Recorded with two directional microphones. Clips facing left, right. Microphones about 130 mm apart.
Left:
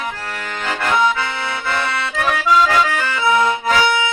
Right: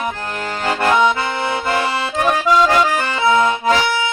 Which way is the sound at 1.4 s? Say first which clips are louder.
Right 6 dB; 45° right (ahead or behind).